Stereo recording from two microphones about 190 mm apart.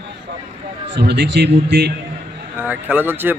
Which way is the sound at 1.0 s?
60° right (ahead or behind).